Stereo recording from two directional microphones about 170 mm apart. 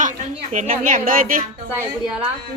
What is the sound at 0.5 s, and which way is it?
Speech, 50° right (ahead or behind).